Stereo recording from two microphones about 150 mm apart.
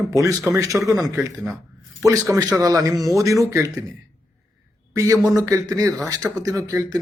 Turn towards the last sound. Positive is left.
turn(degrees=-25)  # may be behind; listen again after turning